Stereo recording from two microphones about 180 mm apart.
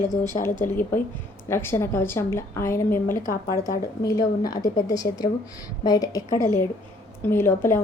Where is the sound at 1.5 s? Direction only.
15° left (ahead or behind).